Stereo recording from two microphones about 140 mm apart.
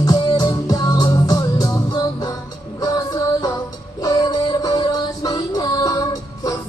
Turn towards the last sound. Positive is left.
turn(degrees=25)  # may be behind; listen again after turning